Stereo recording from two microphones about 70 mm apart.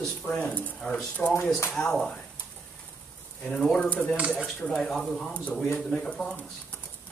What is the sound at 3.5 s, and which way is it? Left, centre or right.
A man's voice, centre.